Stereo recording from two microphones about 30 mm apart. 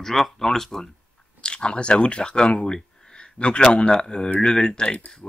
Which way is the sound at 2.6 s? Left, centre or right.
Left.